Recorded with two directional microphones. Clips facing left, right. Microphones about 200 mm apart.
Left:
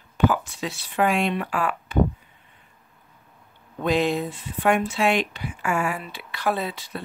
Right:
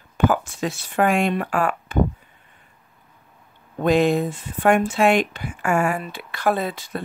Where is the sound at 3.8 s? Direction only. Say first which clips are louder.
Right 5 dB; 50° right (ahead or behind).